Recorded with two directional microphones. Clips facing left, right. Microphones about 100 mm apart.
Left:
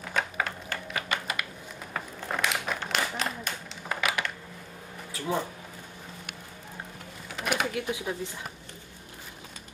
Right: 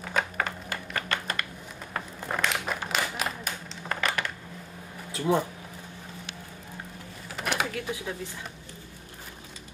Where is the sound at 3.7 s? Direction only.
5° left (ahead or behind).